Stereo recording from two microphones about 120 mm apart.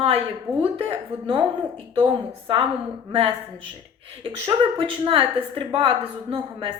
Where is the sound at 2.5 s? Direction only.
45° right (ahead or behind).